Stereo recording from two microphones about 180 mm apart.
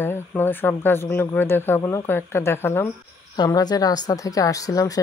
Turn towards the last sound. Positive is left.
turn(degrees=20)  # may be behind; listen again after turning